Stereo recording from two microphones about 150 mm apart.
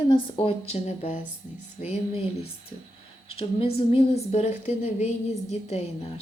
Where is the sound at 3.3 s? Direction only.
40° left (ahead or behind).